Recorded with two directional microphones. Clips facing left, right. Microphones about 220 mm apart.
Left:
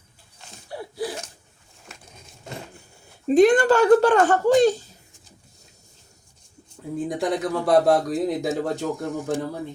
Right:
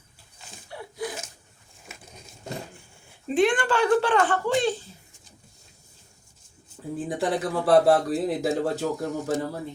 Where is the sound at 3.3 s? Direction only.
40° left (ahead or behind).